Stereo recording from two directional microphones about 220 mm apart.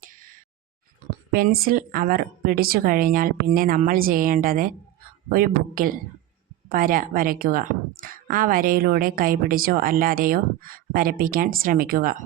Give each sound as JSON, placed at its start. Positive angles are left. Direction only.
{"t": 1.3, "sound": "a woman's voice", "side_deg": -40}